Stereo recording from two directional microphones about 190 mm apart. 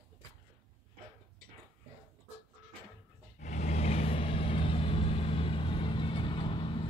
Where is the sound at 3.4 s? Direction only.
40° left (ahead or behind).